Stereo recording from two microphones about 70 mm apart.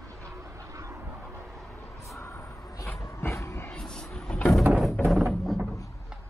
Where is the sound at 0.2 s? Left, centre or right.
Right.